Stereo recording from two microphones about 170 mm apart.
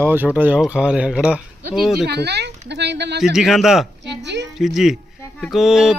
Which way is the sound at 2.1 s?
75° right (ahead or behind).